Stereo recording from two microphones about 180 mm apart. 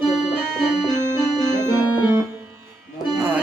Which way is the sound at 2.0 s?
10° right (ahead or behind).